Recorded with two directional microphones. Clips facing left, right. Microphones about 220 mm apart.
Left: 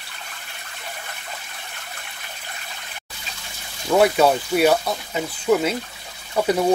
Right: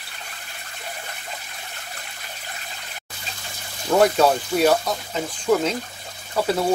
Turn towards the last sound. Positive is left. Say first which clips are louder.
# left 2 dB
turn(degrees=15)  # may be behind; listen again after turning